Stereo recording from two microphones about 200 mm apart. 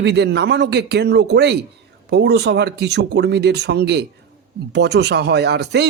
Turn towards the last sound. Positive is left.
turn(degrees=-55)  # may be behind; listen again after turning